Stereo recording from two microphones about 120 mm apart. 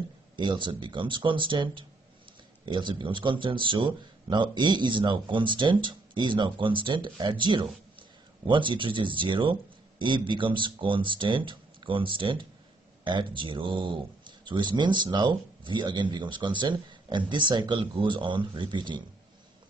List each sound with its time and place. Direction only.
0.4 s speech: 40° right (ahead or behind)